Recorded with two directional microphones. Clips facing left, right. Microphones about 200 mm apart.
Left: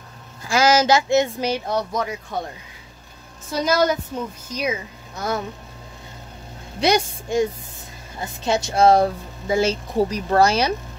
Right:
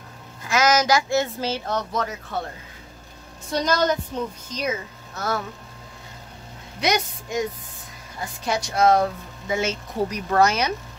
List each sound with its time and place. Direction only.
0.4 s speech: 30° left (ahead or behind); by 2.4 s 15° left (ahead or behind)
3.5 s a woman's voice: 10° left (ahead or behind)
6.8 s a woman's voice: 30° left (ahead or behind)